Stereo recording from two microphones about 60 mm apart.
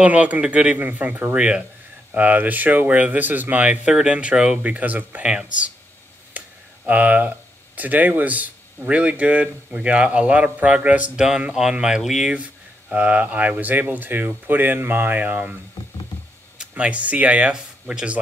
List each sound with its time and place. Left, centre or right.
0.0 s speech: right
2.1 s speech: right
3.8 s speech: centre
4.6 s speech: right
5.2 s speech: centre
6.4 s a sound: right
6.9 s speech: right; by 12.4 s centre
12.9 s speech: right
16.5 s speech: centre